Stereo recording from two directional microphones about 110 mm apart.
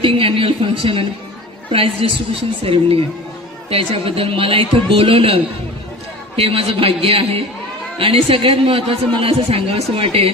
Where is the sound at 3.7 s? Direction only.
60° right (ahead or behind).